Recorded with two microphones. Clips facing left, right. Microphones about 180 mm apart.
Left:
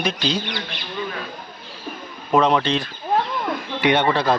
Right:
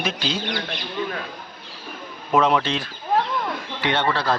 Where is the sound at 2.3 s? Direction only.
5° right (ahead or behind).